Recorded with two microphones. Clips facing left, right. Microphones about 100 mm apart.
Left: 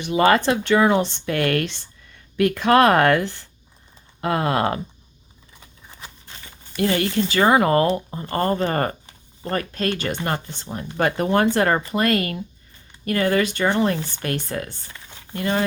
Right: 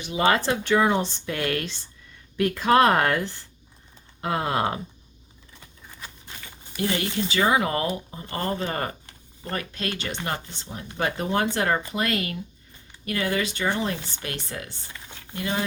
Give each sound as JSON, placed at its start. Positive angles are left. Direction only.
{"t": 0.0, "sound": "speech", "side_deg": 60}
{"t": 6.7, "sound": "speech", "side_deg": 60}